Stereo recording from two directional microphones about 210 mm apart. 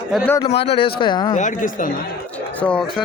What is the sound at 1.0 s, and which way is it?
Speech, 20° left (ahead or behind).